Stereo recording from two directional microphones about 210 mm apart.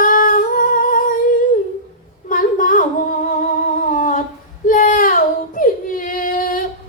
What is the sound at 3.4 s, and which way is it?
Humming, 40° left (ahead or behind).